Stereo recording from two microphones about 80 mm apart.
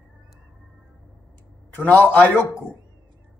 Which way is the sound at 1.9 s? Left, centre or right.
Left.